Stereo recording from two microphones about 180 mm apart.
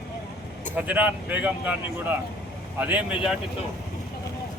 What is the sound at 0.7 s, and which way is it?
Speech, 10° right (ahead or behind).